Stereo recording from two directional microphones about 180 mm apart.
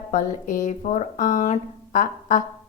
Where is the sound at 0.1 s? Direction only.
45° left (ahead or behind).